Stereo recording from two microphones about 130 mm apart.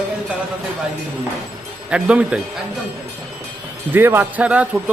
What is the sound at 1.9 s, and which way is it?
Speech, 10° right (ahead or behind).